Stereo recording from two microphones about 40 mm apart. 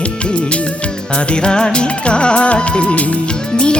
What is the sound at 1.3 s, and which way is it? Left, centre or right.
Music of bollywood, left.